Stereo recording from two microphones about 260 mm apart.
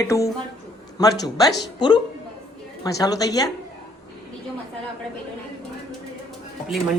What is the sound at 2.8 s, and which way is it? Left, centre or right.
Speech, centre.